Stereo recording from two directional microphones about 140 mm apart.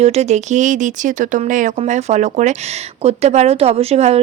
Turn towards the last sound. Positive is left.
turn(degrees=-50)  # may be behind; listen again after turning